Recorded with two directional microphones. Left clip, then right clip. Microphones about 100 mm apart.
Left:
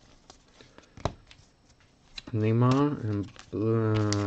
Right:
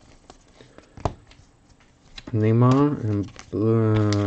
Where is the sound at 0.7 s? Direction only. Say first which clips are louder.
Right 5 dB; 30° left (ahead or behind).